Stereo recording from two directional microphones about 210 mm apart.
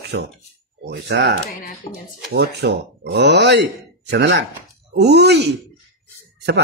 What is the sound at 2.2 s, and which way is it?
Speech, 50° right (ahead or behind).